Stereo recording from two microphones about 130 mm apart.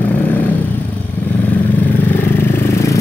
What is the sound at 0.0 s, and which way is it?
Vehicle, 10° left (ahead or behind).